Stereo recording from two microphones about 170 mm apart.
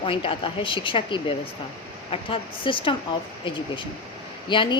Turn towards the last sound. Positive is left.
turn(degrees=30)  # may be behind; listen again after turning